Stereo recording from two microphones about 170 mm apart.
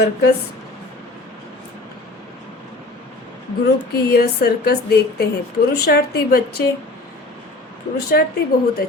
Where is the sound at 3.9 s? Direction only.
70° left (ahead or behind).